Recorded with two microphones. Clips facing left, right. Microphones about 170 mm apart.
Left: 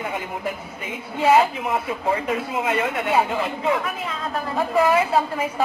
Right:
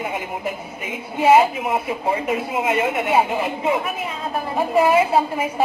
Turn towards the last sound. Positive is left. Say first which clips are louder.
# right 2 dB
turn(degrees=-20)  # may be behind; listen again after turning